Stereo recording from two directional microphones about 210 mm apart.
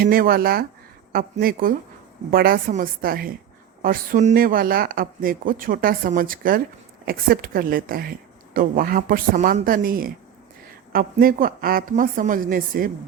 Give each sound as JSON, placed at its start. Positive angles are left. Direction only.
{"t": 0.0, "sound": "speech", "side_deg": -45}